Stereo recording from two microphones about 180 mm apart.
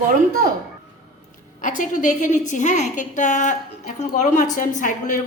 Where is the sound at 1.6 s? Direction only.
45° left (ahead or behind).